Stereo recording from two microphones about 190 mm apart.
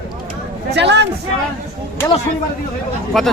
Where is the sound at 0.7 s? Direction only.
65° right (ahead or behind).